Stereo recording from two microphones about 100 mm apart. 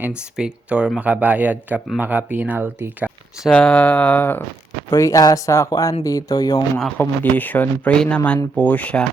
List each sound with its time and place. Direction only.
0.0 s speech: 10° right (ahead or behind)
3.5 s speech: 10° left (ahead or behind)
4.9 s speech: 35° left (ahead or behind)
6.9 s speech: 20° left (ahead or behind)